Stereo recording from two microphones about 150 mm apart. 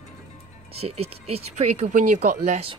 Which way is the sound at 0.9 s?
40° right (ahead or behind).